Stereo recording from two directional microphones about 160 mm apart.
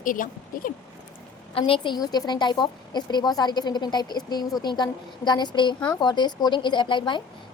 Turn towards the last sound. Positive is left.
turn(degrees=30)  # may be behind; listen again after turning